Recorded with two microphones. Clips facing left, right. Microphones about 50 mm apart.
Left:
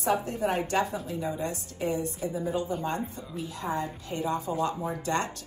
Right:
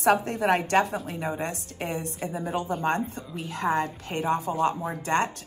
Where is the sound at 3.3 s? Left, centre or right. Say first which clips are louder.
Right 6 dB; right.